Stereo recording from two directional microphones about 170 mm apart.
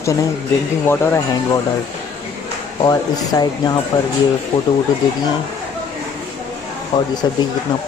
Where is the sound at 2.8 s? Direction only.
20° left (ahead or behind).